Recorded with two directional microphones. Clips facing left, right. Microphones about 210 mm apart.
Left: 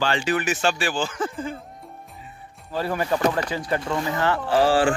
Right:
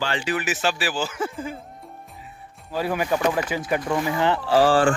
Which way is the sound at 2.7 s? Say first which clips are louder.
Right 1 dB; 5° right (ahead or behind).